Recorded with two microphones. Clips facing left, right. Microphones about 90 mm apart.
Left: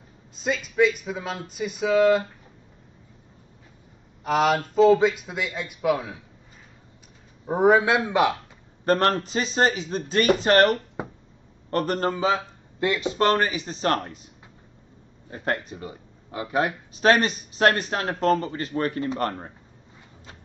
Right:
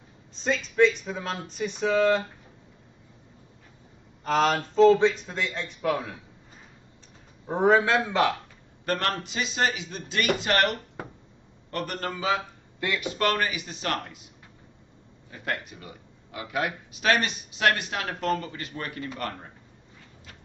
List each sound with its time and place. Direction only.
0.4 s speech: 5° left (ahead or behind)
4.2 s speech: 5° left (ahead or behind)
7.4 s speech: 10° left (ahead or behind)
8.8 s speech: 35° left (ahead or behind)
11.0 s a sound: 20° left (ahead or behind)
11.7 s speech: 35° left (ahead or behind)
15.2 s speech: 35° left (ahead or behind)